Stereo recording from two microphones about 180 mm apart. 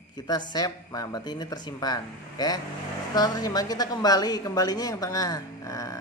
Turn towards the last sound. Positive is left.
turn(degrees=15)  # may be behind; listen again after turning